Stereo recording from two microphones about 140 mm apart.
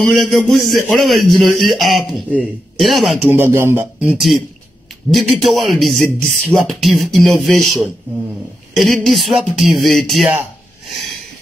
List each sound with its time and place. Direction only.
0.0 s speech: centre (ahead or behind)
3.3 s speech: 15° right (ahead or behind)
4.0 s speech: 5° right (ahead or behind)